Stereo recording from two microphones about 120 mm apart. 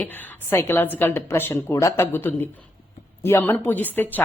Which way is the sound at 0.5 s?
20° left (ahead or behind).